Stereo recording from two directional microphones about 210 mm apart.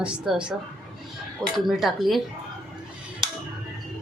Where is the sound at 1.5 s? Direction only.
Centre (ahead or behind).